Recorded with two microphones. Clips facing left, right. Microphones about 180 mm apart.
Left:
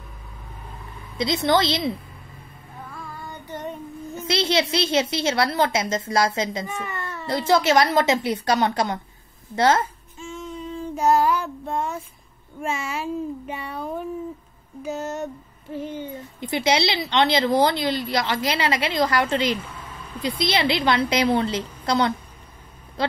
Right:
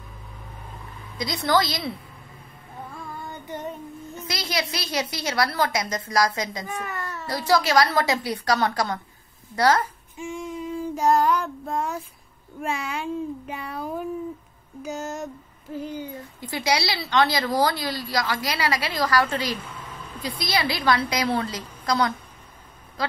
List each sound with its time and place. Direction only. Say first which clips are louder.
1.1 s a woman's voice: left 3 dB; 25° left (ahead or behind)
4.2 s a woman's voice: left 7 dB; 25° left (ahead or behind)
6.8 s baby cry: left 1 dB; centre (ahead or behind)
7.2 s a woman's voice: left 3 dB; 25° left (ahead or behind)
10.1 s a sound: right 3 dB; 15° right (ahead or behind)
11.0 s a child's voice: left 1 dB; centre (ahead or behind)
16.3 s a woman's voice: left 4 dB; 20° left (ahead or behind)